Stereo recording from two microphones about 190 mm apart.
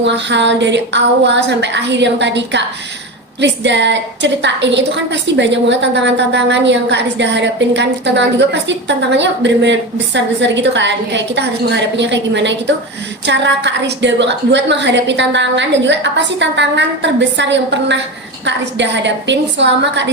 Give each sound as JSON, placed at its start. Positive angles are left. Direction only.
{"t": 0.0, "sound": "a woman's voice", "side_deg": -70}